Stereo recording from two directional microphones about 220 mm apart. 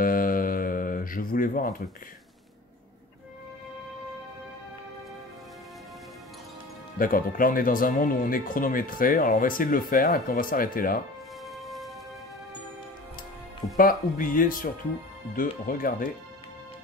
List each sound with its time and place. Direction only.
0.0 s a sound: 40° left (ahead or behind)
7.0 s speech: 40° left (ahead or behind)
11.4 s music: centre (ahead or behind)
13.7 s speech: 40° left (ahead or behind)